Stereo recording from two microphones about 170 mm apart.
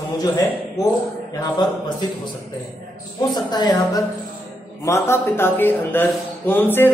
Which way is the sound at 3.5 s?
25° left (ahead or behind).